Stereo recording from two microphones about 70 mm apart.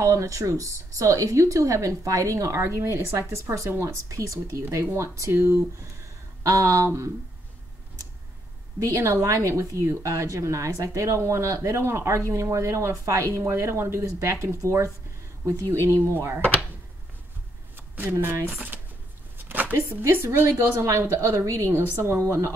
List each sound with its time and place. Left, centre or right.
0.0 s a woman's voice: right
8.7 s a woman's voice: right
17.7 s shuffling cards: right
18.1 s a woman's voice: right